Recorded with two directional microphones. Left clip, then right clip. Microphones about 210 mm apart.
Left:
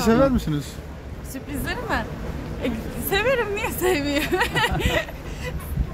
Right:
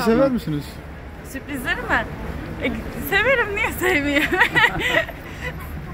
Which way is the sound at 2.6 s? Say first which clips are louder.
Right 3 dB; 20° left (ahead or behind).